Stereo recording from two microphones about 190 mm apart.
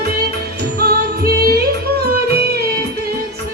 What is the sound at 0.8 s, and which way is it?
Music, 55° right (ahead or behind).